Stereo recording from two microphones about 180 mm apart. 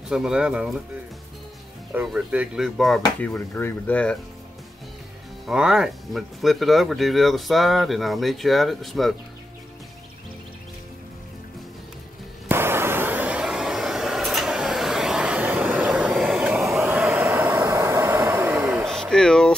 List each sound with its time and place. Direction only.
0.1 s speech: 5° right (ahead or behind)
1.9 s speech: 5° right (ahead or behind)
5.5 s speech: 5° right (ahead or behind)
12.4 s vehicle: 15° right (ahead or behind)
18.9 s a sound: centre (ahead or behind)